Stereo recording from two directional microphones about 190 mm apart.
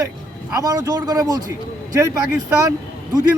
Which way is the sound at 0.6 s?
20° right (ahead or behind).